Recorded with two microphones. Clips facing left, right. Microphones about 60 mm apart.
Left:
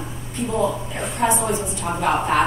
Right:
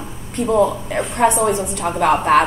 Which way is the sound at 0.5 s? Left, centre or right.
Right.